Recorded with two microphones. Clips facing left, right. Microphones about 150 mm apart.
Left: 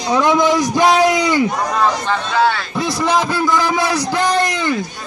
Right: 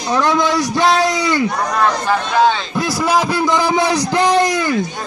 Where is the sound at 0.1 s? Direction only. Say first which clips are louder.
Left 2 dB; 15° left (ahead or behind).